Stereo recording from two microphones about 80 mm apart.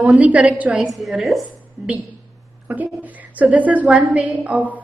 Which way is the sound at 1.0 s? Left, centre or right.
Centre.